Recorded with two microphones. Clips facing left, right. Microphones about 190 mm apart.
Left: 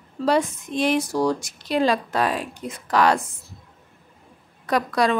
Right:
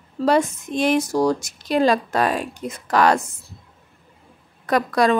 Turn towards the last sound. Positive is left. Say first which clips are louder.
# right 3 dB
turn(degrees=-50)  # may be behind; listen again after turning